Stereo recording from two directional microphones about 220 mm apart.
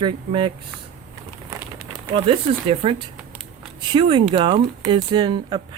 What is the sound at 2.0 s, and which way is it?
Speech, 25° right (ahead or behind).